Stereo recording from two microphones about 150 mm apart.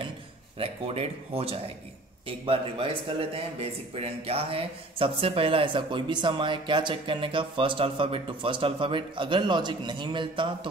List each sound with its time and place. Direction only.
0.6 s speech: 40° right (ahead or behind)